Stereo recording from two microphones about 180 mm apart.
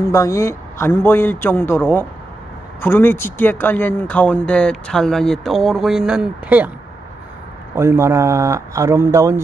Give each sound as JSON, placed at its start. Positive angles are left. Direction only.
{"t": 0.1, "sound": "a man's voice", "side_deg": 15}
{"t": 7.7, "sound": "speech", "side_deg": -15}